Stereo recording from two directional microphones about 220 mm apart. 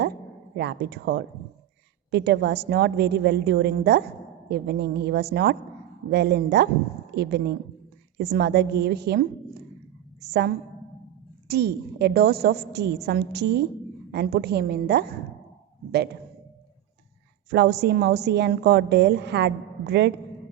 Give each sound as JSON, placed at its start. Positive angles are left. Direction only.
{"t": 0.5, "sound": "a woman's voice", "side_deg": -50}
{"t": 17.5, "sound": "a woman's voice", "side_deg": -50}